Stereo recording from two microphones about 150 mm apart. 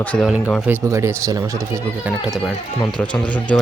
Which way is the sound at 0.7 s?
20° right (ahead or behind).